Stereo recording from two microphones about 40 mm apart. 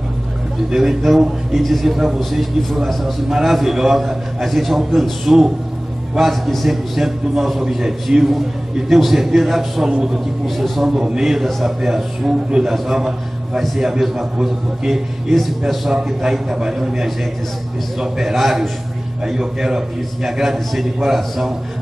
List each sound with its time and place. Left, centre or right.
0.7 s a man's voice: centre
1.6 s a man's voice: centre
9.8 s a man's voice: centre
10.4 s a man's voice: centre
10.9 s a man's voice: centre
15.9 s a man's voice: centre
19.2 s a man's voice: centre